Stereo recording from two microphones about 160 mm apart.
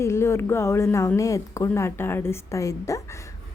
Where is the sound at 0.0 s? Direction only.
15° left (ahead or behind).